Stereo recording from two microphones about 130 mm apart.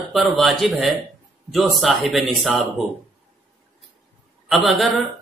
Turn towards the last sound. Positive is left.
turn(degrees=0)  # may be behind; listen again after turning